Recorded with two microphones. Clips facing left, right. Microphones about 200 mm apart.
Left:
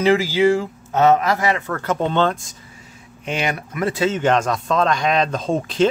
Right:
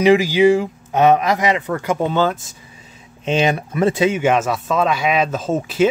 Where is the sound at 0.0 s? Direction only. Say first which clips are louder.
Right 3 dB; 15° right (ahead or behind).